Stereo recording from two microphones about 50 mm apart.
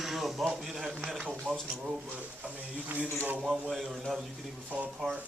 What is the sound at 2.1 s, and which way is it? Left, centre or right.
Speech, right.